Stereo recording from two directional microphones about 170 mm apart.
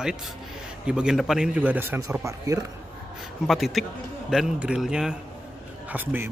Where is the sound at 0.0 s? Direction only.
5° right (ahead or behind); by 2.6 s 20° right (ahead or behind).